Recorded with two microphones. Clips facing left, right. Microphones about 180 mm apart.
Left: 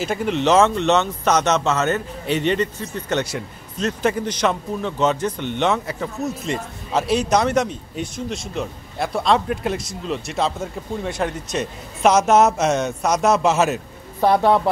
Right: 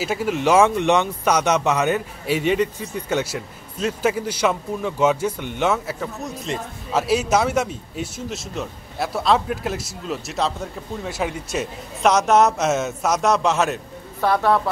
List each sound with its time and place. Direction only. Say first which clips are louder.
0.0 s speech: left 1 dB; 5° right (ahead or behind)
14.2 s speech: left 3 dB; 20° left (ahead or behind)